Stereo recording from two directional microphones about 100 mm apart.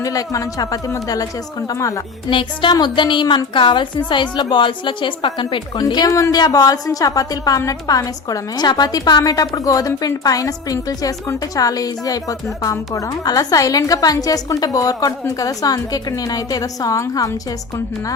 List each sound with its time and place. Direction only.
0.0 s a woman's voice: 35° left (ahead or behind)
2.3 s a woman's voice: 55° left (ahead or behind)
5.8 s a woman's voice: 40° left (ahead or behind)